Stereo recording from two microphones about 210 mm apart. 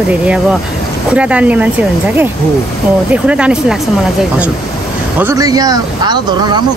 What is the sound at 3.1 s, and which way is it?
Speech, 5° right (ahead or behind).